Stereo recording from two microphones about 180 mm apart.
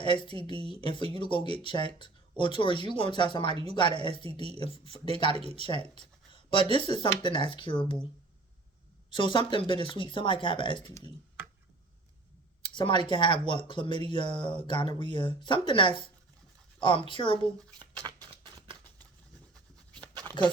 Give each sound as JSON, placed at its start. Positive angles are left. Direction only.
{"t": 0.0, "sound": "a woman's voice", "side_deg": 25}
{"t": 4.4, "sound": "speech", "side_deg": -35}
{"t": 4.7, "sound": "speech", "side_deg": 30}
{"t": 9.0, "sound": "speech", "side_deg": 25}
{"t": 12.6, "sound": "speech", "side_deg": 25}
{"t": 18.0, "sound": "a sound", "side_deg": -25}
{"t": 20.0, "sound": "writing", "side_deg": -25}